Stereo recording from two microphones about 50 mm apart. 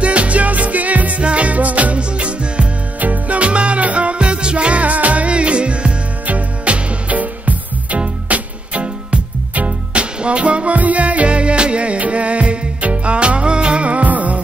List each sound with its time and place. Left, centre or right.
0.0 s music: right